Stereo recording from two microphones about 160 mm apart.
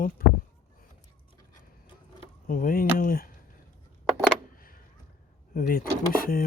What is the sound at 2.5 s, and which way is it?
Speech, 60° left (ahead or behind).